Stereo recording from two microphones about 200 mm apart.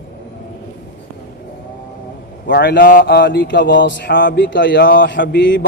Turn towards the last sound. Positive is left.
turn(degrees=60)  # may be behind; listen again after turning